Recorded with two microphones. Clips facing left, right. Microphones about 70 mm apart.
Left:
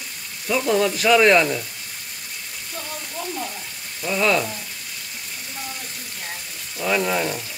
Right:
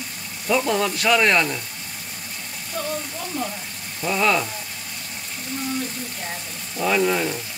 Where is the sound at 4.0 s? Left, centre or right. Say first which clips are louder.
Even; centre.